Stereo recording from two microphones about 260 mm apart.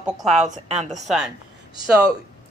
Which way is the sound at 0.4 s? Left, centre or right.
Right.